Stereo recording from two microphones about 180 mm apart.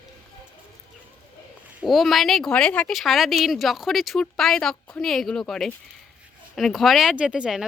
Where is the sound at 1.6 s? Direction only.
5° right (ahead or behind).